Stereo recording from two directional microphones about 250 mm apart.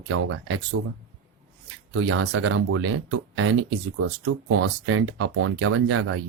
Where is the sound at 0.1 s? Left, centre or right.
Right.